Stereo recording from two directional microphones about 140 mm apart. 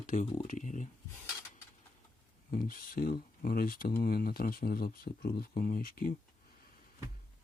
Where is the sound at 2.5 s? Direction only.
85° left.